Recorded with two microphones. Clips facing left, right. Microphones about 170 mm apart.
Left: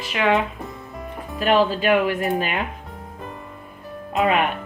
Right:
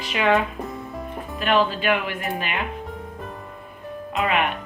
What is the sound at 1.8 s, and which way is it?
Speech, 40° left (ahead or behind).